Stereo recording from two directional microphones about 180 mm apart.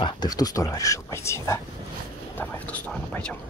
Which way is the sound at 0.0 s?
20° left (ahead or behind).